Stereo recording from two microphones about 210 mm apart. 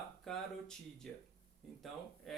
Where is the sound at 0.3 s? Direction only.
Centre (ahead or behind).